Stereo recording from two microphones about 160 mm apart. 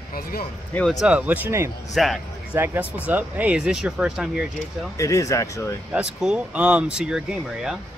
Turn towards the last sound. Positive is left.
turn(degrees=-5)  # may be behind; listen again after turning